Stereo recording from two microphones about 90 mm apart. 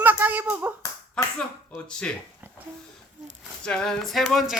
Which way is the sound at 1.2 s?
10° left (ahead or behind).